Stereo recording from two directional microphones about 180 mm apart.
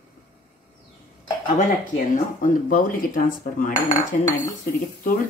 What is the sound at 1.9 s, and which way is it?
A woman's voice, 45° left (ahead or behind).